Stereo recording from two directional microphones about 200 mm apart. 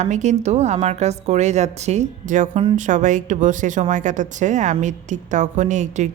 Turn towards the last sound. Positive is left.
turn(degrees=-35)  # may be behind; listen again after turning